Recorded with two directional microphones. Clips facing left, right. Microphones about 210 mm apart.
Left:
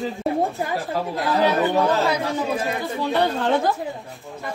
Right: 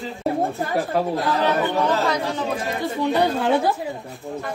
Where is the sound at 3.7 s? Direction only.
Centre (ahead or behind).